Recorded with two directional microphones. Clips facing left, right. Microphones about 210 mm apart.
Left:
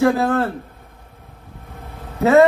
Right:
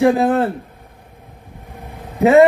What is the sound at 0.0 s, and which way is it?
Speech, 15° right (ahead or behind).